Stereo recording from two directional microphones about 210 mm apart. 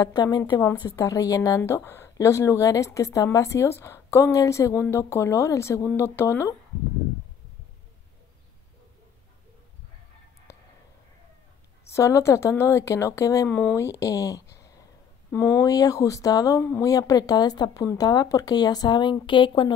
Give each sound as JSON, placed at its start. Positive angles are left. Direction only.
{"t": 0.0, "sound": "speech", "side_deg": 20}
{"t": 11.9, "sound": "speech", "side_deg": 15}